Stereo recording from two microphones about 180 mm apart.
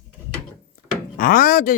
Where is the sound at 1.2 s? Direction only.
50° left (ahead or behind).